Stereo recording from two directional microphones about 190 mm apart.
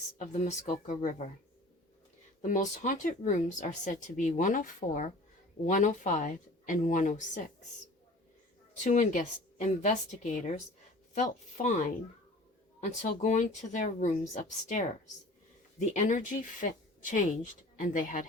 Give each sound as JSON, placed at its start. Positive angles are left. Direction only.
{"t": 0.2, "sound": "speech", "side_deg": 40}
{"t": 2.4, "sound": "speech", "side_deg": 40}
{"t": 8.8, "sound": "speech", "side_deg": 40}